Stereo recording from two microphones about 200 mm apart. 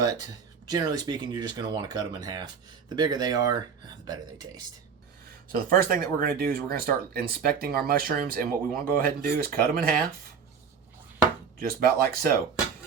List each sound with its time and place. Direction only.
0.7 s speech: 20° right (ahead or behind)
5.5 s speech: 45° right (ahead or behind)
11.6 s speech: 45° right (ahead or behind)